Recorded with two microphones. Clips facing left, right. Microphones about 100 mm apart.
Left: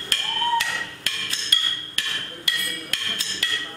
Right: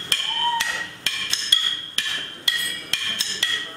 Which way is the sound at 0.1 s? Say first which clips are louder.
Left 1 dB; 25° right (ahead or behind).